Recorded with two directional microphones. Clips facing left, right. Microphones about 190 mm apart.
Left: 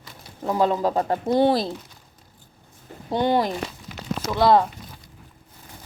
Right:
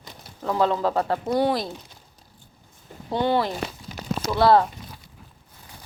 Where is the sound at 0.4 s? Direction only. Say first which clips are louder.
Left 1 dB; 15° left (ahead or behind).